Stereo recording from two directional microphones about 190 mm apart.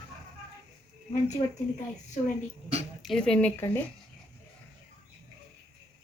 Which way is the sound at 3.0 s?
5° left (ahead or behind).